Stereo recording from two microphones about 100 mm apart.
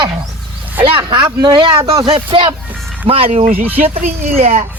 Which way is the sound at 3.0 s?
75° right (ahead or behind).